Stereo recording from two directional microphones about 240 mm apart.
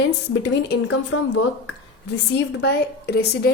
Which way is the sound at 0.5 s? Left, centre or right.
Left.